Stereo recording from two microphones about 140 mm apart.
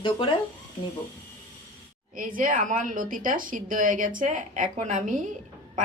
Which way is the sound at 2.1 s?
75° right (ahead or behind).